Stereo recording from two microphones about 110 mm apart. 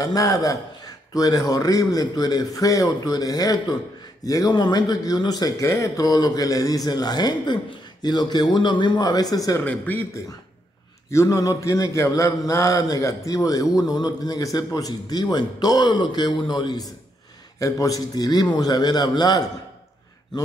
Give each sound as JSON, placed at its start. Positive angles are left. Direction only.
{"t": 0.0, "sound": "a man's voice", "side_deg": 35}
{"t": 9.7, "sound": "speech", "side_deg": 15}
{"t": 11.1, "sound": "a man's voice", "side_deg": 30}